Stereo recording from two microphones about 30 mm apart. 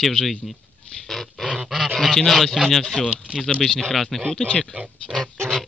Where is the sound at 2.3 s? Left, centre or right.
Centre.